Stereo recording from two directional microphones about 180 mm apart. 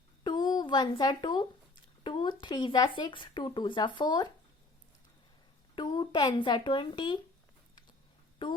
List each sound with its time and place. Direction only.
0.3 s speech: 25° left (ahead or behind)
2.0 s a sound: 30° left (ahead or behind)
2.4 s speech: 25° left (ahead or behind)
5.7 s speech: 25° left (ahead or behind)
8.4 s speech: 25° left (ahead or behind)